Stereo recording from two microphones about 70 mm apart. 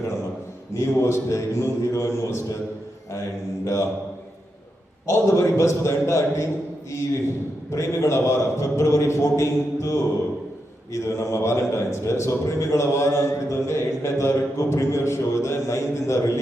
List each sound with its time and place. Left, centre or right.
0.7 s a man's voice: left
5.0 s a man's voice: left
7.7 s a man's voice: left